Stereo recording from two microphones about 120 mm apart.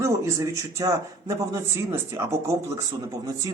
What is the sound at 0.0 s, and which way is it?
Speech, 25° right (ahead or behind).